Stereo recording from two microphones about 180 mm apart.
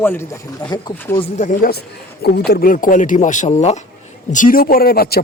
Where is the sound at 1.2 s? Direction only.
40° left (ahead or behind).